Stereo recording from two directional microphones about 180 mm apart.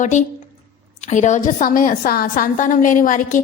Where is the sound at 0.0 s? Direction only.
40° left (ahead or behind).